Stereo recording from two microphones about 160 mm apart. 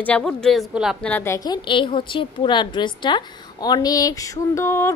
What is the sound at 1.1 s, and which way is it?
A woman's voice, 15° left (ahead or behind).